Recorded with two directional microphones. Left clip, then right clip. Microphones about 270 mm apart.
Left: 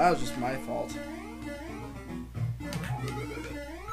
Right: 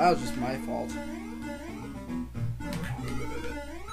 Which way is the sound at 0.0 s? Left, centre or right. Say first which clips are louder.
Right 1 dB; centre.